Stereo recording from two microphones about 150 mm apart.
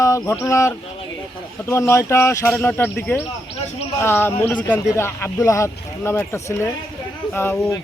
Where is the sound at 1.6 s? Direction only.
20° left (ahead or behind).